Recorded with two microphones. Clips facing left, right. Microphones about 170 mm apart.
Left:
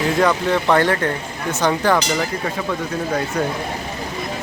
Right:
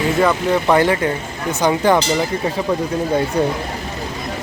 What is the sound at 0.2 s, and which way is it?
Speech, 5° right (ahead or behind).